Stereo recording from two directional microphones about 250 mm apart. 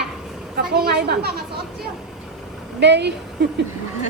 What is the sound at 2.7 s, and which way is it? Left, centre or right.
Speech, right.